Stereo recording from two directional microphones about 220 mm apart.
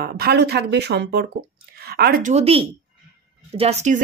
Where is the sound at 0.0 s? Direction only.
45° right (ahead or behind).